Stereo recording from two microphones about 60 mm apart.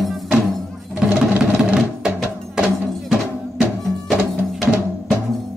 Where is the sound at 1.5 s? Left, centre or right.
Centre.